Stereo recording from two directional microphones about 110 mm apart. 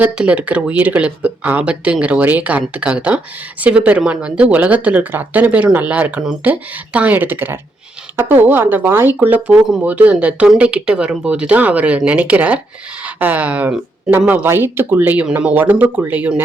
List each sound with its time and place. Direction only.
0.0 s speech: 15° right (ahead or behind)